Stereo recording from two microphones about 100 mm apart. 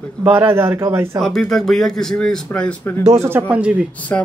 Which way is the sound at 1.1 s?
5° left (ahead or behind).